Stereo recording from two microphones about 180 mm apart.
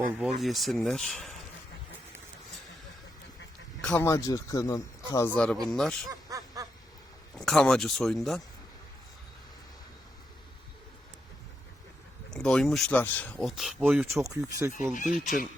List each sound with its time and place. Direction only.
0.1 s speech: centre (ahead or behind)
3.8 s speech: 5° left (ahead or behind)
4.1 s speech: 20° left (ahead or behind); by 6.1 s 5° left (ahead or behind)
6.1 s snicker: 20° right (ahead or behind)
7.3 s speech: 5° left (ahead or behind)
12.3 s speech: 5° left (ahead or behind); by 14.7 s 15° right (ahead or behind)
14.9 s speech: 45° left (ahead or behind)